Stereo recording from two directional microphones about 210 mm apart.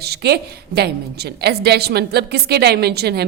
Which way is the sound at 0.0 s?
50° right (ahead or behind).